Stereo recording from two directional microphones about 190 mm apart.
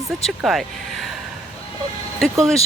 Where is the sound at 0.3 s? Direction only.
Centre (ahead or behind).